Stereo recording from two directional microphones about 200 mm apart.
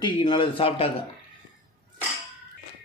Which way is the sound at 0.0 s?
20° left (ahead or behind).